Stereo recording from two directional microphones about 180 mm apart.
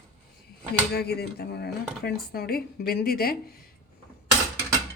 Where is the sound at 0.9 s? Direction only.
60° left (ahead or behind).